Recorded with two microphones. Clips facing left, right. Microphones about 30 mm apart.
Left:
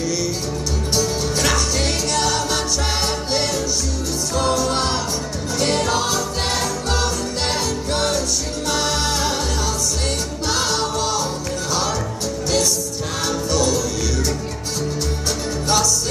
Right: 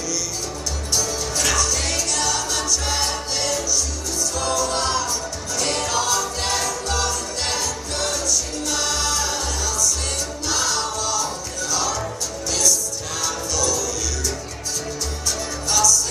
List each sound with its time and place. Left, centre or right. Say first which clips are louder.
0.9 s music: left 3 dB; left
10.5 s music: left 3 dB; left
12.4 s music: left 1 dB; left
15.7 s music: even; left